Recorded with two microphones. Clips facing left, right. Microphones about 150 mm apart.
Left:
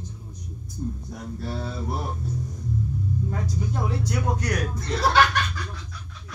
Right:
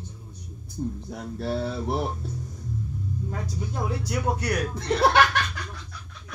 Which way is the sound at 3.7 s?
10° right (ahead or behind).